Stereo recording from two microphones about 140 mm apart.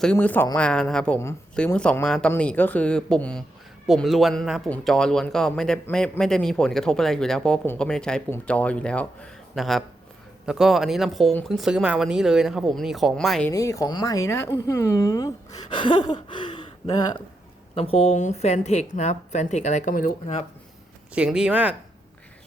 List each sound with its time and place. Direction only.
0.0 s speech: 10° left (ahead or behind)
13.5 s speech: 20° left (ahead or behind)
15.7 s a sound: 35° left (ahead or behind)
16.9 s speech: 30° left (ahead or behind)
17.7 s a woman's voice: 45° left (ahead or behind); by 20.4 s 65° left (ahead or behind)
21.1 s speech: 5° right (ahead or behind)